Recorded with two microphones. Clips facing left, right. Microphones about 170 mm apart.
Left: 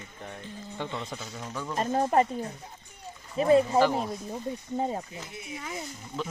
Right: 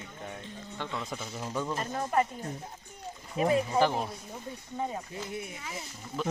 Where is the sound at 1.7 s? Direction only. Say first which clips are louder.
Left 6 dB; 35° left (ahead or behind).